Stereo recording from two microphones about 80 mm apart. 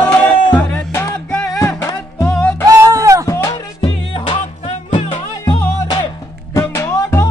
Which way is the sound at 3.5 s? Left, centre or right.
Left.